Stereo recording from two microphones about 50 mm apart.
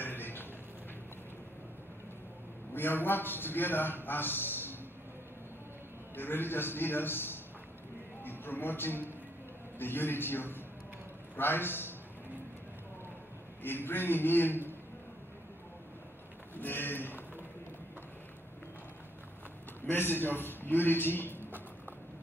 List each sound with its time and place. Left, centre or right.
0.0 s a sound: left
2.7 s a man's voice: left
6.1 s a man's voice: left
8.2 s a sound: left
9.8 s a man's voice: left
13.6 s a man's voice: left
16.5 s speech: left
19.9 s a man's voice: left
21.4 s a sound: right